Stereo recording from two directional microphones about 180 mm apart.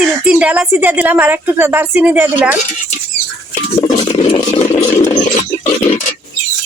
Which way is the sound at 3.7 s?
20° left (ahead or behind).